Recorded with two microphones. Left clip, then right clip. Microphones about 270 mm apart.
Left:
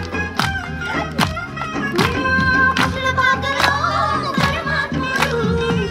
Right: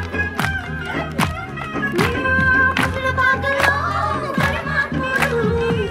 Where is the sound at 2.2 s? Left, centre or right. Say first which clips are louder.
Even; left.